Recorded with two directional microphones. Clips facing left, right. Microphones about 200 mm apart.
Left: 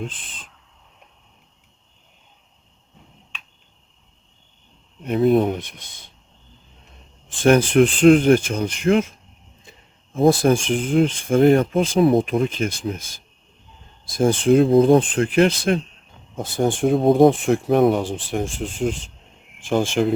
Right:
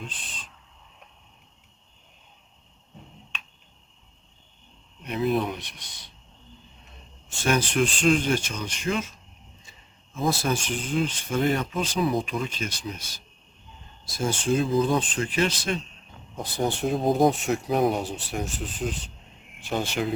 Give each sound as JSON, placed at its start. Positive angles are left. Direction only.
{"t": 5.0, "sound": "speech", "side_deg": 50}
{"t": 7.3, "sound": "speech", "side_deg": 55}
{"t": 20.0, "sound": "speech", "side_deg": 50}